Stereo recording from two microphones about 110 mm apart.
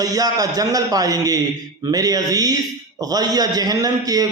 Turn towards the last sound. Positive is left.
turn(degrees=-35)  # may be behind; listen again after turning